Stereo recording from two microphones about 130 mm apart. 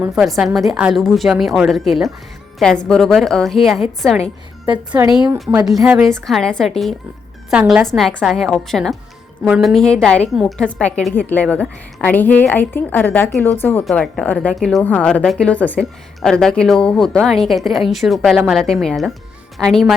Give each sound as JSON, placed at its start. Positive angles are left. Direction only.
{"t": 0.0, "sound": "a woman's voice", "side_deg": -5}
{"t": 5.6, "sound": "a woman's voice", "side_deg": 0}
{"t": 7.9, "sound": "a woman's voice", "side_deg": 0}
{"t": 13.8, "sound": "a woman's voice", "side_deg": 5}